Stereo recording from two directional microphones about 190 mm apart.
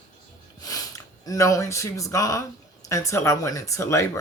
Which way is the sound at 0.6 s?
20° left (ahead or behind).